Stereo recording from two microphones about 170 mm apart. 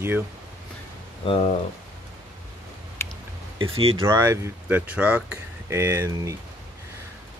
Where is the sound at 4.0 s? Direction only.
15° right (ahead or behind).